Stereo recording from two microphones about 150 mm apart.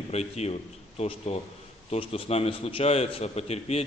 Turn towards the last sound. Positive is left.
turn(degrees=45)  # may be behind; listen again after turning